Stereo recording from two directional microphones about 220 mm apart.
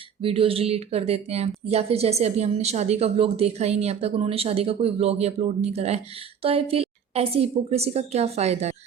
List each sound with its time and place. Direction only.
0.2 s speech: 25° right (ahead or behind)